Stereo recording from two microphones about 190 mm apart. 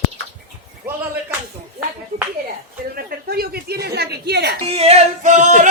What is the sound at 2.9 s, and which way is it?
Speech, 55° right (ahead or behind).